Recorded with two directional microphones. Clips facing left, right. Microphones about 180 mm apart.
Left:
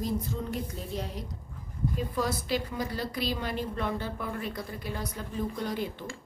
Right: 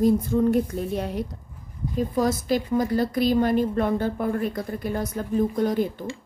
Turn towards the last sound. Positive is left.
turn(degrees=-45)  # may be behind; listen again after turning